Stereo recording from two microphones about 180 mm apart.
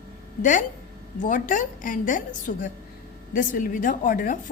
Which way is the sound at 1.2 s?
45° left (ahead or behind).